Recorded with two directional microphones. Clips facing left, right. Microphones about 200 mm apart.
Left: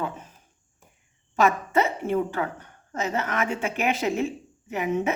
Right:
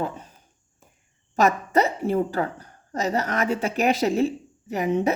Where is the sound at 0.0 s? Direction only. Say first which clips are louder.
Right 2 dB; 35° right (ahead or behind).